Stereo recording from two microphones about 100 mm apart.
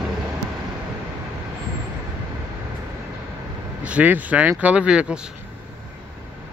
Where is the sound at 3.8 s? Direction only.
15° right (ahead or behind).